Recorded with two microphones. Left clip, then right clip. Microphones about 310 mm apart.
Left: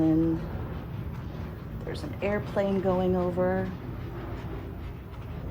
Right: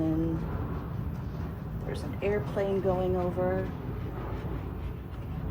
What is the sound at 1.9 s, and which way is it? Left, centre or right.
A woman's voice, left.